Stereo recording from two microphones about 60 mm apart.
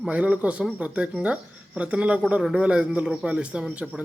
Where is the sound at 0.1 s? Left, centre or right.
Right.